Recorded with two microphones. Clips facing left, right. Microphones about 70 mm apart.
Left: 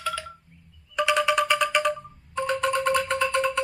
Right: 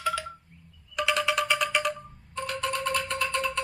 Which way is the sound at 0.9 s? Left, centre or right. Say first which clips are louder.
Left 4 dB; centre.